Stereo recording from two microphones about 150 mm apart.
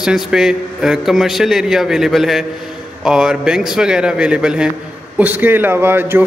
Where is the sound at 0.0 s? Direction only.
5° right (ahead or behind).